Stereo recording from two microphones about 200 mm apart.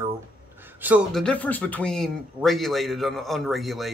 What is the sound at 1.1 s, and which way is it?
Speech, 5° left (ahead or behind).